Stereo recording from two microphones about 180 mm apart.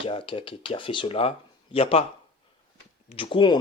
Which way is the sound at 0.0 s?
30° left (ahead or behind).